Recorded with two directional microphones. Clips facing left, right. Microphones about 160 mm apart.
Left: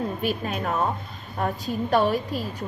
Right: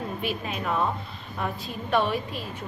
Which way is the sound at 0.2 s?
45° left (ahead or behind).